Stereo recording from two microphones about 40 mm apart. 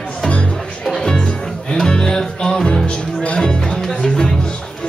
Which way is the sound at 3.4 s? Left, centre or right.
Centre.